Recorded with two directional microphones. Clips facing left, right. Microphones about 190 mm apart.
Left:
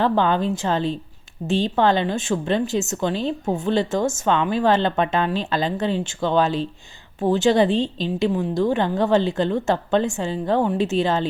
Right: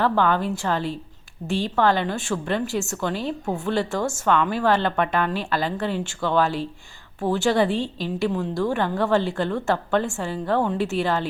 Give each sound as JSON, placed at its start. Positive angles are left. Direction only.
{"t": 0.0, "sound": "a woman's voice", "side_deg": 20}